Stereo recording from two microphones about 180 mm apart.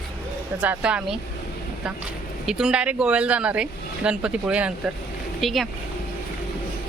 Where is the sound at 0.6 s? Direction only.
5° right (ahead or behind).